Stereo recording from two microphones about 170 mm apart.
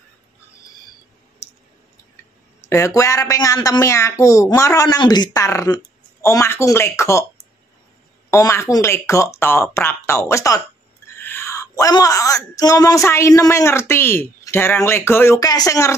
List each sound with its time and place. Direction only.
2.7 s speech: 20° left (ahead or behind)
8.3 s speech: 15° left (ahead or behind)